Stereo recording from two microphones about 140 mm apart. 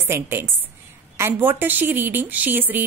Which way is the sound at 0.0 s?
15° right (ahead or behind).